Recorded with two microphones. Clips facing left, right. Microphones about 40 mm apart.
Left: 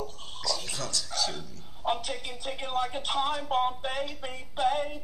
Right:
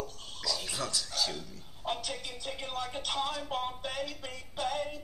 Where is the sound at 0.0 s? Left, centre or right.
Left.